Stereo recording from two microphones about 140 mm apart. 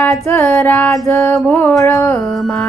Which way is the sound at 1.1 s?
20° left (ahead or behind).